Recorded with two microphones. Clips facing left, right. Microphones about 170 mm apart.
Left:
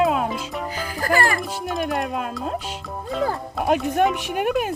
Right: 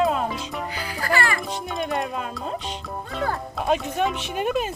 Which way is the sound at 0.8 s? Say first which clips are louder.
Left 3 dB; 45° left (ahead or behind).